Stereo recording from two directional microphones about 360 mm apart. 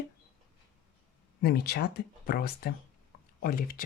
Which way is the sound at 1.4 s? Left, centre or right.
Left.